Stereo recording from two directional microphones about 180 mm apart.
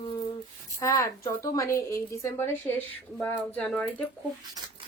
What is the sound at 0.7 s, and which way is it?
A woman's voice, 20° left (ahead or behind).